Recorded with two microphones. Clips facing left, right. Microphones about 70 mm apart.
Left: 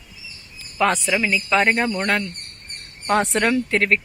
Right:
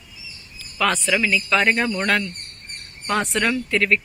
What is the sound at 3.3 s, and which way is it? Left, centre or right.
Speech, left.